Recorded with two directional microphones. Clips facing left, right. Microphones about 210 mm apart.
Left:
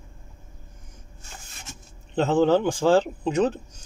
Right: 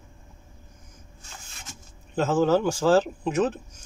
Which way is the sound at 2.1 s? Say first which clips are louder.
Left 2 dB; 20° left (ahead or behind).